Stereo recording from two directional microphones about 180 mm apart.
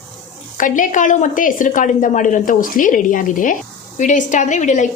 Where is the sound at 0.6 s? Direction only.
45° left (ahead or behind).